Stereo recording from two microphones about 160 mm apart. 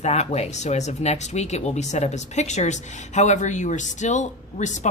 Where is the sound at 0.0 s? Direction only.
45° left (ahead or behind).